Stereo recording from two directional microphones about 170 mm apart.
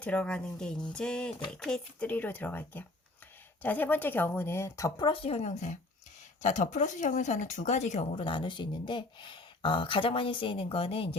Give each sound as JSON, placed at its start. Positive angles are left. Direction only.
{"t": 0.0, "sound": "speech", "side_deg": 5}
{"t": 8.2, "sound": "speech", "side_deg": 30}